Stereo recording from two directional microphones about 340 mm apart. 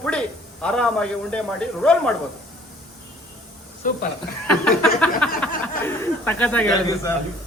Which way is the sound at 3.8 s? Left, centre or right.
Left.